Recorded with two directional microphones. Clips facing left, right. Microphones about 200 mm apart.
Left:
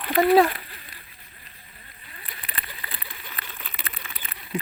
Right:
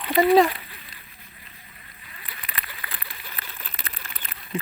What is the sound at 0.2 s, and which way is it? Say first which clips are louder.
Speech: even; centre (ahead or behind).